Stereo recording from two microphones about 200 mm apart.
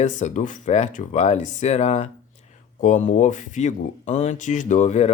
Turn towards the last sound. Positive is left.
turn(degrees=35)  # may be behind; listen again after turning